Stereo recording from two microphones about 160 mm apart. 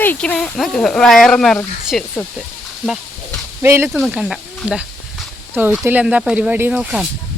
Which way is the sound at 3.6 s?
15° right (ahead or behind).